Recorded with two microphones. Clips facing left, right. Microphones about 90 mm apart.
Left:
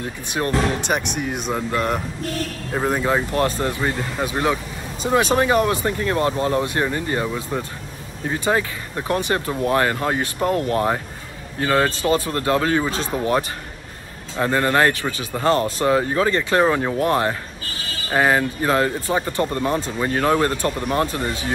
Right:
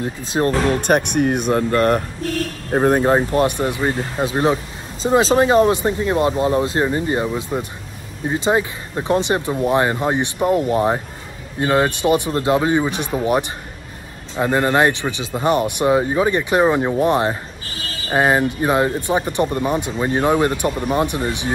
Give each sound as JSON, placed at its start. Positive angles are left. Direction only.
{"t": 0.3, "sound": "speech", "side_deg": -35}
{"t": 3.3, "sound": "speech", "side_deg": -20}